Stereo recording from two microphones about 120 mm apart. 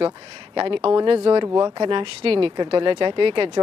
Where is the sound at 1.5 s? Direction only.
30° right (ahead or behind).